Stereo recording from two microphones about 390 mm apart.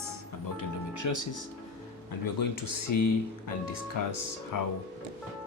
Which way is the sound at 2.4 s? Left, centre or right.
Left.